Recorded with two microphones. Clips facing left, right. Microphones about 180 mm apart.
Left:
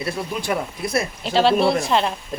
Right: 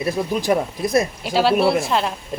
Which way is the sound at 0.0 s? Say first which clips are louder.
Right 5 dB; 20° right (ahead or behind).